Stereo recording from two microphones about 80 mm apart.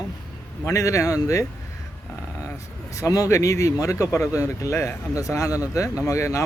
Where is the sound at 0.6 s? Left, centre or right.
Left.